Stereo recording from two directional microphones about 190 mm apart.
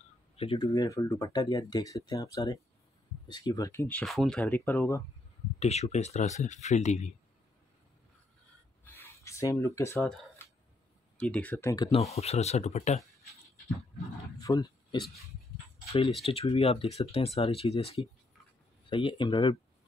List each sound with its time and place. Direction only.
0.4 s speech: 25° left (ahead or behind)
5.6 s speech: 35° left (ahead or behind)
8.8 s a sound: 10° left (ahead or behind)
11.1 s speech: 5° left (ahead or behind)
12.1 s speech: 35° left (ahead or behind)
14.4 s speech: 20° left (ahead or behind)
16.3 s speech: 30° left (ahead or behind)